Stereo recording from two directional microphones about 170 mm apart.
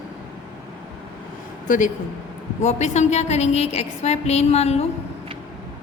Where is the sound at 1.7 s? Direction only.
45° left (ahead or behind).